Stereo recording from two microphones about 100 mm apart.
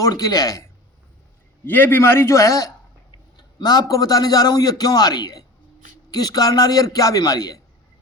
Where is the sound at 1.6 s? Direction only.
20° left (ahead or behind); by 7.6 s 40° left (ahead or behind).